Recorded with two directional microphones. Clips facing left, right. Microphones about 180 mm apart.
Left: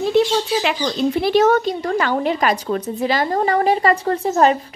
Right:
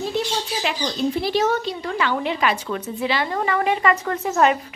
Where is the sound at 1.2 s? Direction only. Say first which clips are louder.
Left 10 dB; 55° left (ahead or behind).